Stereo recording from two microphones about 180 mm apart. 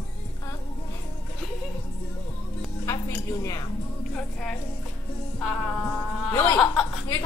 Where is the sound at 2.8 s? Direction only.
20° left (ahead or behind).